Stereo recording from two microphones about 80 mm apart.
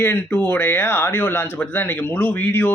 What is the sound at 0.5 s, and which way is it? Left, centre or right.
Speech, left.